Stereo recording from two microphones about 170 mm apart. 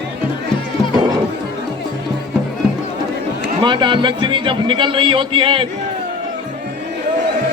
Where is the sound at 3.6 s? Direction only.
30° right (ahead or behind).